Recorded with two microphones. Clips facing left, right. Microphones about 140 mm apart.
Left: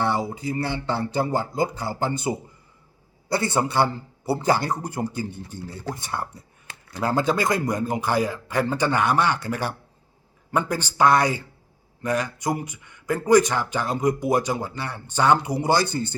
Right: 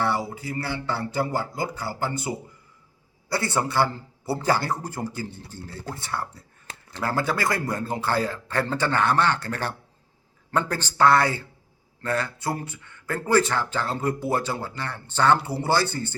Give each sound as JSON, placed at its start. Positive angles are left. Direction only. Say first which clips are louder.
{"t": 0.0, "sound": "speech", "louder": "left 2 dB", "side_deg": 20}